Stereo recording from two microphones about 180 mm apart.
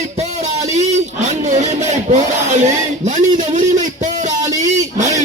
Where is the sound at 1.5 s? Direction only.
40° right (ahead or behind).